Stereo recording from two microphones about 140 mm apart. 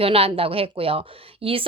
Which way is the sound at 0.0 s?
45° right (ahead or behind).